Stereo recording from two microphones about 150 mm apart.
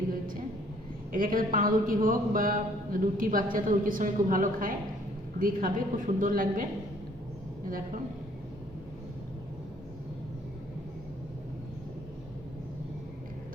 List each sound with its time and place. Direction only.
1.1 s a woman's voice: 65° right (ahead or behind)